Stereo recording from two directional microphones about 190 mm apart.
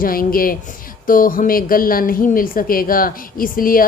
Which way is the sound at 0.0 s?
50° left (ahead or behind).